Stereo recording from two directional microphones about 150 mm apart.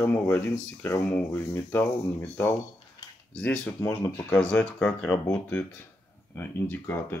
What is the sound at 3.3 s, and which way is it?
Speech, 5° left (ahead or behind).